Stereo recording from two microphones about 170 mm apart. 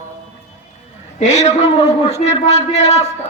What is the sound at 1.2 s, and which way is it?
A man's voice, 40° left (ahead or behind).